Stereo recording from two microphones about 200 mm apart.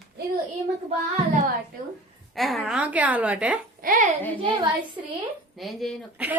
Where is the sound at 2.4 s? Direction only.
Centre (ahead or behind).